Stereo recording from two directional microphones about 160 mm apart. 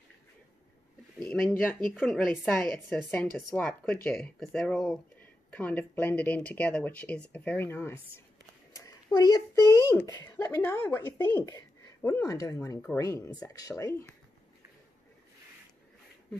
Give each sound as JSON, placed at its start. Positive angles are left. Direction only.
{"t": 1.2, "sound": "speech", "side_deg": 10}